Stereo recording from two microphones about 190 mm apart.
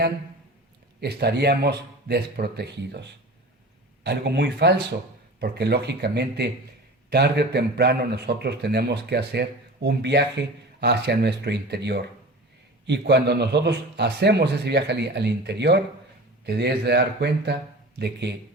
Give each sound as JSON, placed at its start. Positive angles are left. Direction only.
{"t": 1.0, "sound": "a man's voice", "side_deg": -60}